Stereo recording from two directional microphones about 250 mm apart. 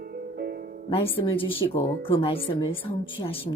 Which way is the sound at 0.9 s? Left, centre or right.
Left.